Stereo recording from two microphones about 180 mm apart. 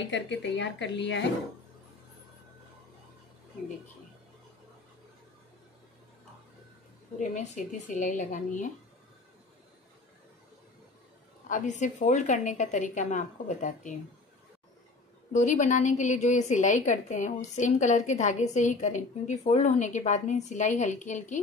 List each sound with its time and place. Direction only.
0.0 s speech: 80° left
7.2 s a woman's voice: 40° left (ahead or behind)
11.4 s a woman's voice: 45° left (ahead or behind)
15.3 s a woman's voice: 40° left (ahead or behind)